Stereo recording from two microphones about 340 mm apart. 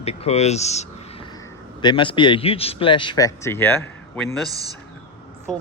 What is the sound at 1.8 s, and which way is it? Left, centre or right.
Speech, centre.